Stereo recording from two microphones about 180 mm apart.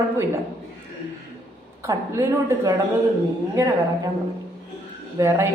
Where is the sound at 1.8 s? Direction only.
15° right (ahead or behind).